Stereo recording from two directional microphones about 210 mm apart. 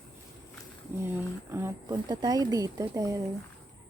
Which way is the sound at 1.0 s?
10° right (ahead or behind).